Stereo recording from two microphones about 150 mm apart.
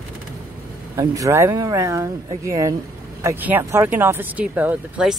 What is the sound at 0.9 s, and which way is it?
Speech, 20° right (ahead or behind).